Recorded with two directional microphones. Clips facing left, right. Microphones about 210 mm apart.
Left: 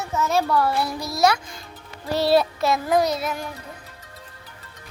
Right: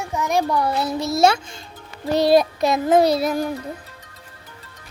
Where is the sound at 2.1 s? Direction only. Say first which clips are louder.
Right 3 dB; 15° right (ahead or behind); by 3.4 s 35° right (ahead or behind).